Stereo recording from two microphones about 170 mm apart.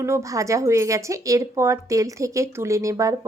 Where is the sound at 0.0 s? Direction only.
15° right (ahead or behind).